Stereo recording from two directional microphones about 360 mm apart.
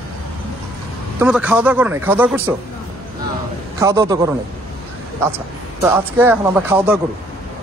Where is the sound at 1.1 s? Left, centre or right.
Centre.